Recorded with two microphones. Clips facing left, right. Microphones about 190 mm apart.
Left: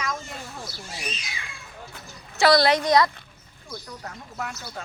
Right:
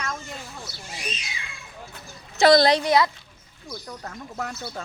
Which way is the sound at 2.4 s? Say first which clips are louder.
Right 2 dB; 20° right (ahead or behind).